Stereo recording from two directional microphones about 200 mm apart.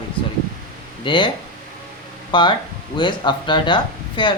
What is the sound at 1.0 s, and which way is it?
Speech, 25° left (ahead or behind).